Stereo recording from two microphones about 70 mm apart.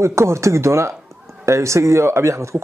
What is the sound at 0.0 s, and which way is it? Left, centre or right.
Speech, right.